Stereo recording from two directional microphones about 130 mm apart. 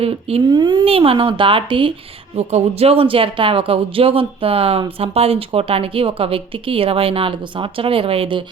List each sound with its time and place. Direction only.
0.0 s speech: 50° right (ahead or behind)
0.5 s speech: 35° right (ahead or behind)
2.3 s speech: 55° right (ahead or behind)